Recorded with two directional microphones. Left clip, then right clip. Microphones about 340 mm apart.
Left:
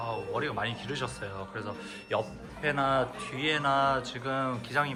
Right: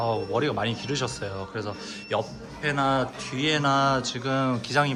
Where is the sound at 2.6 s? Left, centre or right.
Centre.